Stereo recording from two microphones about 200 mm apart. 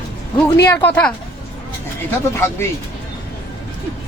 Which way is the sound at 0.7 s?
10° left (ahead or behind).